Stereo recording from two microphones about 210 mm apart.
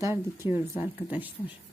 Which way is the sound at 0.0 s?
10° right (ahead or behind).